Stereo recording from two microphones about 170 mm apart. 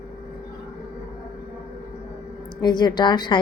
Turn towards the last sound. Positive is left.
turn(degrees=25)  # may be behind; listen again after turning